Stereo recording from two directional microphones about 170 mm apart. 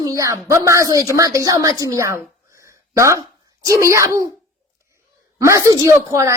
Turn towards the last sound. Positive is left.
turn(degrees=-15)  # may be behind; listen again after turning